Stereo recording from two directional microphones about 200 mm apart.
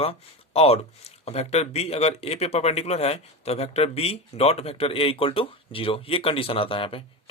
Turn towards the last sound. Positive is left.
turn(degrees=25)  # may be behind; listen again after turning